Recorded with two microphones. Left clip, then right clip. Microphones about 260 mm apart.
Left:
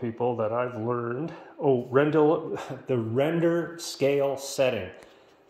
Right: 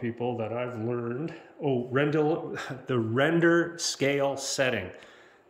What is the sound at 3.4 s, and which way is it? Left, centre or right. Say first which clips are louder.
Speech: right 2 dB; centre.